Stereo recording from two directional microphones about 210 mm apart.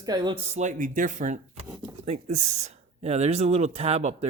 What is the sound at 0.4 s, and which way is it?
Speech, 35° right (ahead or behind).